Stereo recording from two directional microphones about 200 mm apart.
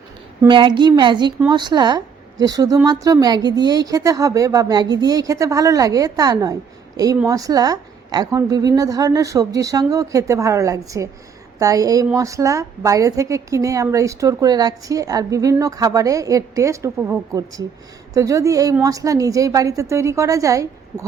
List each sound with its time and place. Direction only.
0.4 s a woman's voice: 25° right (ahead or behind)